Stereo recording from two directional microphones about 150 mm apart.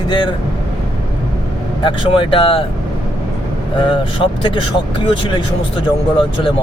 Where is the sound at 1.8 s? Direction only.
35° left (ahead or behind).